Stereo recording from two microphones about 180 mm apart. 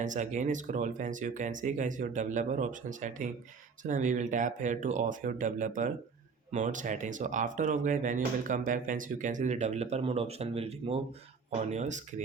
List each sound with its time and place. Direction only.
0.0 s speech: 45° right (ahead or behind)